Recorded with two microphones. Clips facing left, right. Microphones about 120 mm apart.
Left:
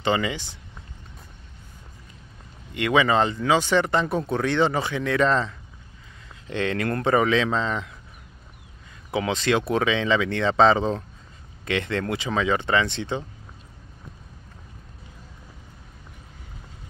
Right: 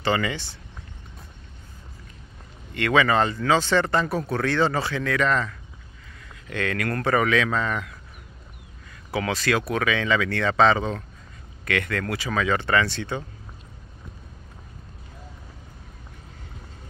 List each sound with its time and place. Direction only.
0.0 s speech: 20° left (ahead or behind)
2.7 s speech: 15° left (ahead or behind)
9.1 s speech: 20° left (ahead or behind)